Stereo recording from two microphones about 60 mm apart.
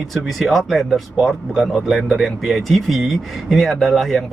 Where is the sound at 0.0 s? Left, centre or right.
Centre.